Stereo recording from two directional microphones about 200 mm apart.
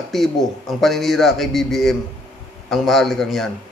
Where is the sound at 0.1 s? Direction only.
Centre (ahead or behind).